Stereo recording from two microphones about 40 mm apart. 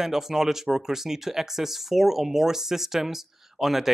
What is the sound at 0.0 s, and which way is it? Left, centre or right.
Speech, centre.